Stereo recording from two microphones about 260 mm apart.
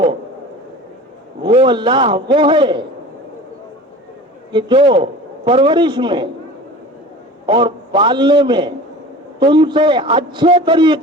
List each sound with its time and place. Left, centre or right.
1.4 s a man's voice: centre
4.5 s a man's voice: centre
7.4 s a man's voice: centre